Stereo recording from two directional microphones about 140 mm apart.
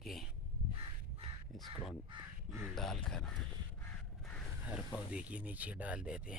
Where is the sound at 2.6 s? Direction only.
5° left (ahead or behind).